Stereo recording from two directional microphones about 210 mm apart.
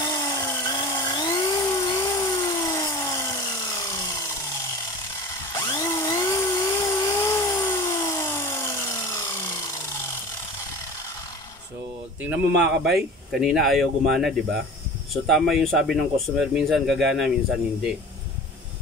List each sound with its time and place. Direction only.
0.0 s chainsaw: 20° left (ahead or behind)
3.6 s sawing: 15° left (ahead or behind)
5.5 s a sound: 15° left (ahead or behind)
12.2 s speech: 5° right (ahead or behind)